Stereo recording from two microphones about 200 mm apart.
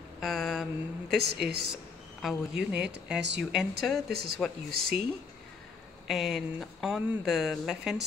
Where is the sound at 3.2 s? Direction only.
60° right (ahead or behind).